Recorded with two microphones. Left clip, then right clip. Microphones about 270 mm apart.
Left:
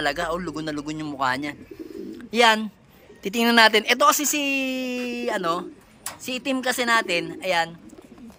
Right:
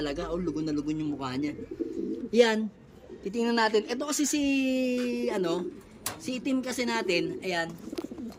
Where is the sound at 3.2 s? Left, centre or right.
Left.